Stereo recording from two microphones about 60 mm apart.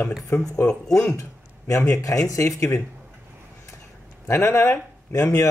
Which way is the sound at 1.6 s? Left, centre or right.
Left.